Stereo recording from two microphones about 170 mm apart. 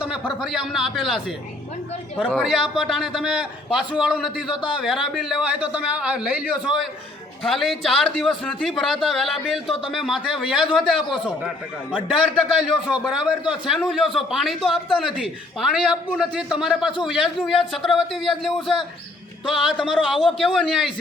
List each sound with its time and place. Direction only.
0.5 s a man's voice: centre (ahead or behind)
2.3 s a man's voice: centre (ahead or behind)
4.4 s a man's voice: 30° left (ahead or behind)
4.8 s a man's voice: 5° right (ahead or behind)